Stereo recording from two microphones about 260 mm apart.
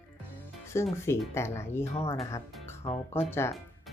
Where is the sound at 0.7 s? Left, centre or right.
Centre.